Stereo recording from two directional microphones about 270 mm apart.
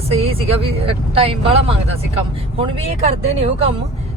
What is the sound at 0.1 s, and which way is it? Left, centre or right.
Speech, right.